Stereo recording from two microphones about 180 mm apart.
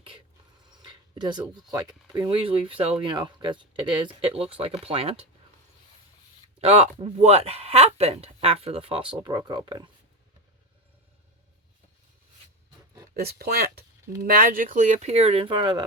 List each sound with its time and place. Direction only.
0.8 s speech: 25° right (ahead or behind)
6.6 s speech: 35° right (ahead or behind)
13.1 s speech: 60° right (ahead or behind); by 15.8 s 25° right (ahead or behind)